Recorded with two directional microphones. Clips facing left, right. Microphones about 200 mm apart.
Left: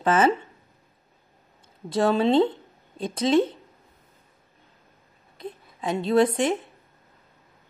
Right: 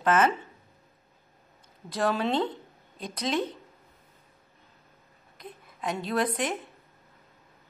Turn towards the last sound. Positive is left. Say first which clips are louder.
# left 8 dB
turn(degrees=25)  # may be behind; listen again after turning